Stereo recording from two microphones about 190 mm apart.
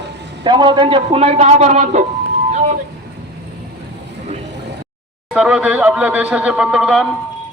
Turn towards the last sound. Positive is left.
turn(degrees=0)  # may be behind; listen again after turning